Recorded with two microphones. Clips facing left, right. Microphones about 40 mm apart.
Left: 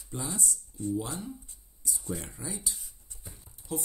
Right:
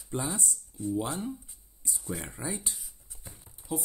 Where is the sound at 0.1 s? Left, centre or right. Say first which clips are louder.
Right 5 dB; right.